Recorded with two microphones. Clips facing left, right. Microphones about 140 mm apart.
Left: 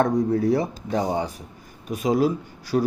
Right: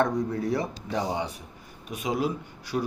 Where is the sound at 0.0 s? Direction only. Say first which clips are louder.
Left 5 dB; 35° left (ahead or behind).